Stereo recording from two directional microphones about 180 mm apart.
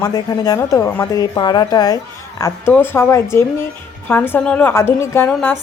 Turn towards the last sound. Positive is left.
turn(degrees=10)  # may be behind; listen again after turning